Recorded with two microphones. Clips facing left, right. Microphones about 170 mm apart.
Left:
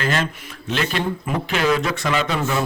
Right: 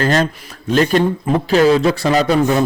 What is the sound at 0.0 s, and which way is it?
A man's voice, 40° right (ahead or behind).